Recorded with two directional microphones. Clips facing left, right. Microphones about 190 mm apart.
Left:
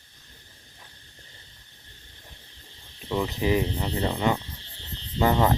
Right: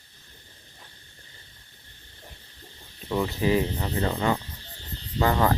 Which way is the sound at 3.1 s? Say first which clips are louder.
Right 1 dB; centre (ahead or behind).